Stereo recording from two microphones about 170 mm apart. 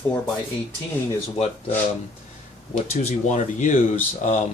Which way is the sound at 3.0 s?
45° left (ahead or behind).